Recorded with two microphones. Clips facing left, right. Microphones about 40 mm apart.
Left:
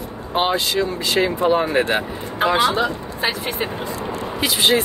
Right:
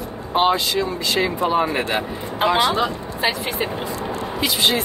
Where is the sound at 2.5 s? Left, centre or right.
Centre.